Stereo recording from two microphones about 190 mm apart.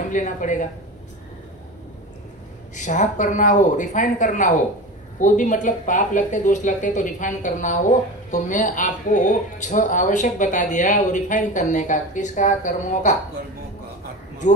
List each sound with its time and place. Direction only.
0.1 s speech: 40° left (ahead or behind)
2.7 s speech: 40° left (ahead or behind)